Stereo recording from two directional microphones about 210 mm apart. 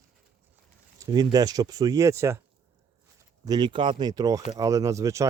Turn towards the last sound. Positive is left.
turn(degrees=-15)  # may be behind; listen again after turning